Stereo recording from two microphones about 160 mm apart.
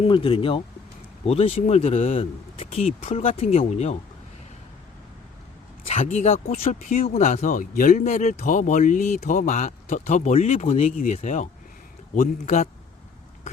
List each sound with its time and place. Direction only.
0.0 s speech: 35° left (ahead or behind)
5.8 s speech: 45° left (ahead or behind)